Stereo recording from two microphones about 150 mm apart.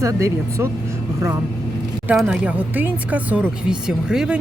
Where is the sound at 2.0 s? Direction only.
5° right (ahead or behind).